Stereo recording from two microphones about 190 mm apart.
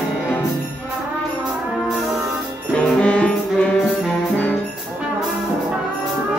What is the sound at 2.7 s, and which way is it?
Brass instrument, 5° left (ahead or behind).